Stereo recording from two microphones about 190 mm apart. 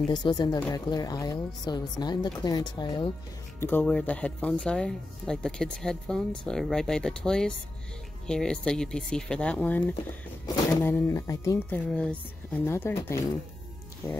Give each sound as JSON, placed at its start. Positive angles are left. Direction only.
{"t": 0.1, "sound": "speech", "side_deg": 20}
{"t": 3.5, "sound": "speech", "side_deg": 10}
{"t": 10.4, "sound": "speech", "side_deg": 20}
{"t": 11.9, "sound": "speech", "side_deg": 5}